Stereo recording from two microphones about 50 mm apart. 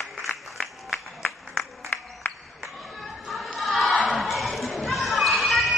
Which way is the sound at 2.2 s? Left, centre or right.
Left.